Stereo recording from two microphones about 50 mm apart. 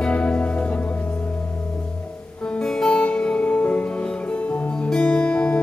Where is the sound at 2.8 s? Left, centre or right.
Centre.